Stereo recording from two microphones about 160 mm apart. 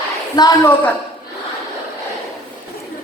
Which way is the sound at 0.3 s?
20° left (ahead or behind).